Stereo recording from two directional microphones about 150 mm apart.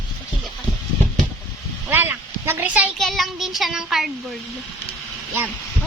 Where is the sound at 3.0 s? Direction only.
Centre (ahead or behind).